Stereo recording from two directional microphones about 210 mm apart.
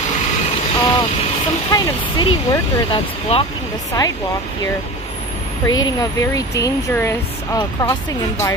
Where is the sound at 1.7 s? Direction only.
20° left (ahead or behind).